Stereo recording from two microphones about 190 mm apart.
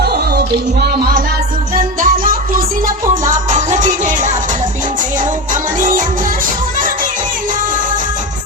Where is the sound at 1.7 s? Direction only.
45° right (ahead or behind).